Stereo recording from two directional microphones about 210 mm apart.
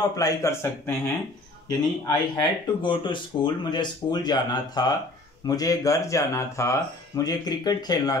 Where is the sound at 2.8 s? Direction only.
25° left (ahead or behind).